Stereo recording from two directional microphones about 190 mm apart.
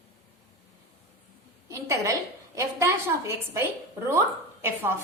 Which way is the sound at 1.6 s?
15° right (ahead or behind).